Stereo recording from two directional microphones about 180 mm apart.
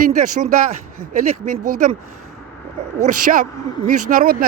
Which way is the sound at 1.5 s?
45° right (ahead or behind).